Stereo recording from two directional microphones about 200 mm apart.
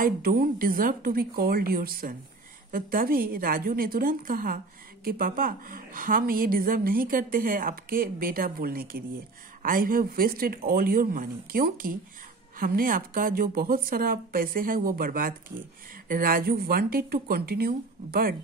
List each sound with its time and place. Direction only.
0.0 s a woman's voice: 45° right (ahead or behind)